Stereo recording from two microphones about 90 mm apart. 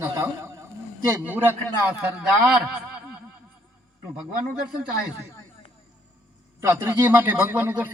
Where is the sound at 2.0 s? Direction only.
10° right (ahead or behind).